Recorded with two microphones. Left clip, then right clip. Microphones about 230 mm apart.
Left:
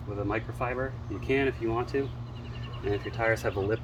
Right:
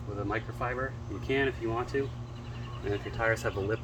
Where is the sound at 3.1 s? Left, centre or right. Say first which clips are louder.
Left 1 dB; centre.